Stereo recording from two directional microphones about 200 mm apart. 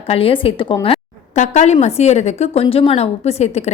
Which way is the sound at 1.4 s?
35° left (ahead or behind).